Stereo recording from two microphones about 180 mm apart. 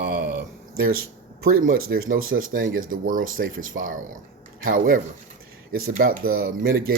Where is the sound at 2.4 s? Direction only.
90° right.